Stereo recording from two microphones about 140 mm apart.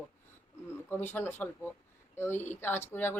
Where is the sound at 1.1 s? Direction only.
15° left (ahead or behind).